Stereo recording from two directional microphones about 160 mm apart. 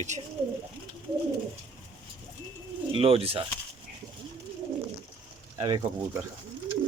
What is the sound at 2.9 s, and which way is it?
Speech, 35° right (ahead or behind).